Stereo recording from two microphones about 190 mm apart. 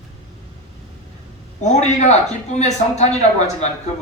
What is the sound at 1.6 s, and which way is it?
Speech, 40° left (ahead or behind).